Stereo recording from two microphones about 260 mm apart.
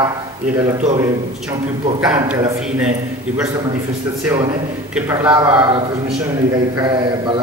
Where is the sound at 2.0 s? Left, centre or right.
Centre.